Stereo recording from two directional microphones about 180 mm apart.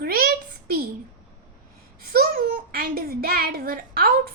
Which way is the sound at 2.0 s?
55° right (ahead or behind).